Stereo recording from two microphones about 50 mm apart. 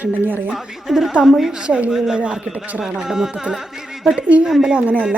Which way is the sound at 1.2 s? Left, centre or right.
Centre.